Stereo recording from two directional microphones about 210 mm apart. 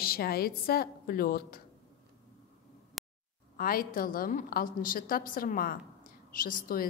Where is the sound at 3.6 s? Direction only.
45° left (ahead or behind).